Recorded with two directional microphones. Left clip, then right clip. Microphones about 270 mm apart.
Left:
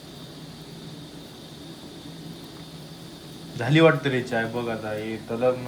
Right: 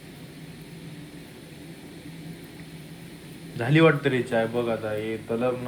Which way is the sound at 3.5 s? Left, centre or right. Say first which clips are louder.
Left 1 dB; centre.